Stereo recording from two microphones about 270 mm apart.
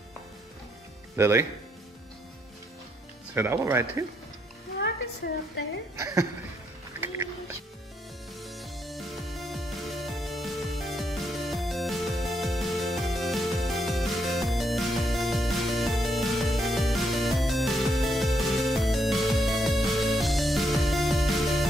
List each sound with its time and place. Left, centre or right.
1.1 s speech: centre
3.3 s speech: centre
5.2 s a woman's voice: left
5.9 s speech: centre
7.0 s a sound: centre
8.4 s music: centre